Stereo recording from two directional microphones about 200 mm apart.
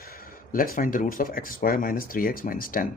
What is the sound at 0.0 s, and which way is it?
Speech, 50° left (ahead or behind).